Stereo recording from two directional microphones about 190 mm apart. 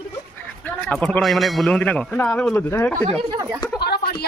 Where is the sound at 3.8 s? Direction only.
55° left (ahead or behind).